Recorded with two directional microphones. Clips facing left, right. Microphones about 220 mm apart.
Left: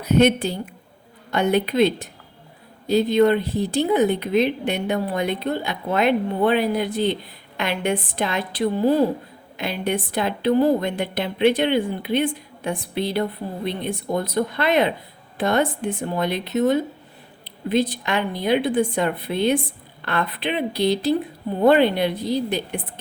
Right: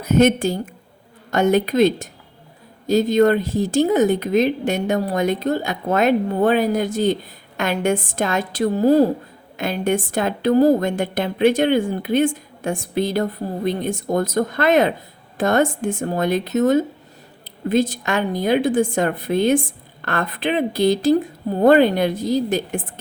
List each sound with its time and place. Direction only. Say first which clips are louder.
0.0 s a woman's voice: right 2 dB; 45° right (ahead or behind)